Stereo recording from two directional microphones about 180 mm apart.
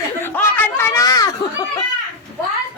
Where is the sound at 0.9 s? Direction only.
20° left (ahead or behind).